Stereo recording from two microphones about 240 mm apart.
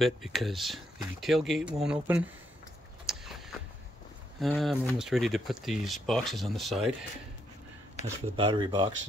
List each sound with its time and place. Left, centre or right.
0.0 s speech: centre
3.1 s a sound: centre
4.4 s speech: centre
8.4 s speech: centre